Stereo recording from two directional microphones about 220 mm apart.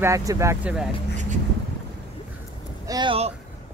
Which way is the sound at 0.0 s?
15° right (ahead or behind).